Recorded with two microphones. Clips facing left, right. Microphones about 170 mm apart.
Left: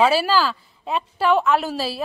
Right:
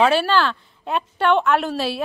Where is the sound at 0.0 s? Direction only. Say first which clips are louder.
Right 1 dB; 5° left (ahead or behind).